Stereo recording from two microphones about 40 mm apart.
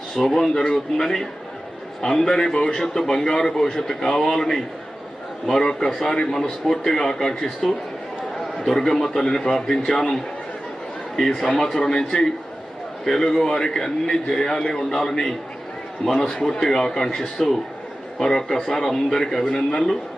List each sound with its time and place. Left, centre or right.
0.3 s a man's voice: centre
11.2 s a man's voice: centre